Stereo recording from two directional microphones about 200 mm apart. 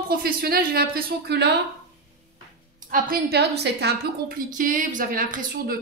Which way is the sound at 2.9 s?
50° right (ahead or behind).